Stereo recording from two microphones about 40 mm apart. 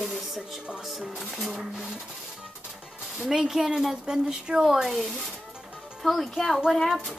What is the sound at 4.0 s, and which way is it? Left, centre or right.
A woman's voice, centre.